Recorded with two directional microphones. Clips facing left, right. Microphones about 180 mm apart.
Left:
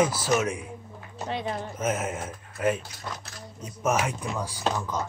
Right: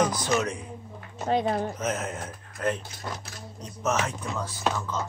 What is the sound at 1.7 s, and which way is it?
Speech, 10° left (ahead or behind).